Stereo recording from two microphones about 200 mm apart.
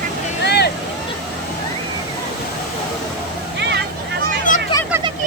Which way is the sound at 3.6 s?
60° right (ahead or behind).